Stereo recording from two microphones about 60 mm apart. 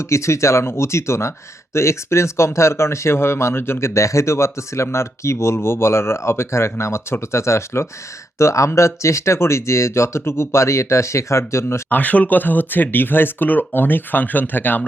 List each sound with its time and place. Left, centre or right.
0.0 s speech: left
11.9 s speech: left